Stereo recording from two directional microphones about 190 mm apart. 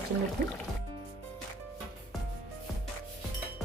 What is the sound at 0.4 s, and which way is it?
Speech, 45° right (ahead or behind).